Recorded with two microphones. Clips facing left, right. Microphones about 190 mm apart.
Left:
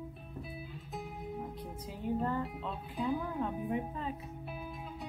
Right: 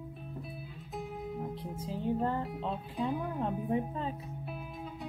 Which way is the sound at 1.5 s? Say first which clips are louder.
Right 5 dB; 30° right (ahead or behind).